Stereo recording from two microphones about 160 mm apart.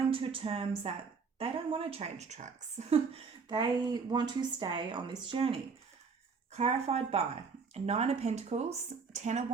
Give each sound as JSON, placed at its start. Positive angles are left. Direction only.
{"t": 0.1, "sound": "a woman's voice", "side_deg": -35}